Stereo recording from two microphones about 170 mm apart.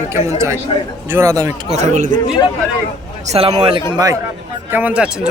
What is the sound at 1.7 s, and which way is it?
Speech, 40° right (ahead or behind).